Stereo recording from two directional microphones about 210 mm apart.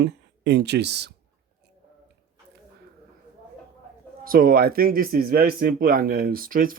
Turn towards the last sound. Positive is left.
turn(degrees=-40)  # may be behind; listen again after turning